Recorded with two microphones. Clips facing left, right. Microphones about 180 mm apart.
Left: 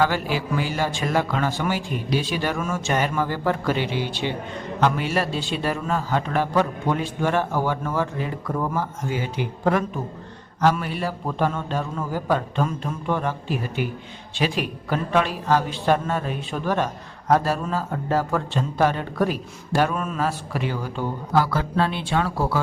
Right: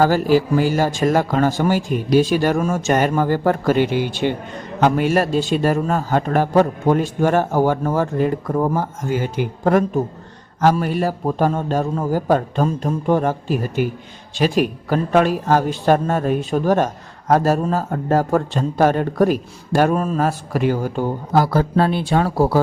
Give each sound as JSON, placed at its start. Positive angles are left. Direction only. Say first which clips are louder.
{"t": 0.0, "sound": "speech", "louder": "right 8 dB", "side_deg": -40}